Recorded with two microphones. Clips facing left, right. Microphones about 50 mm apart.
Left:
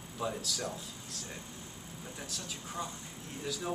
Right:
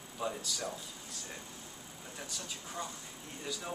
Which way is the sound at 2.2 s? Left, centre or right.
Centre.